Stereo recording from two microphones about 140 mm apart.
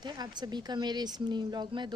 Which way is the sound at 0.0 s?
30° right (ahead or behind).